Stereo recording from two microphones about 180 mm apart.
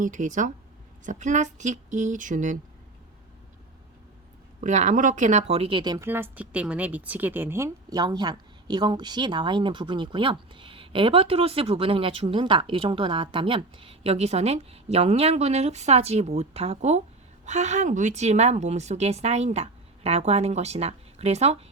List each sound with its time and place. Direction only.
0.0 s speech: 45° right (ahead or behind)
4.6 s a woman's voice: 45° right (ahead or behind)